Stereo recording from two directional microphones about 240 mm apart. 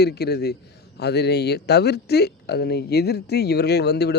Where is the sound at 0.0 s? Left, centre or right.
Left.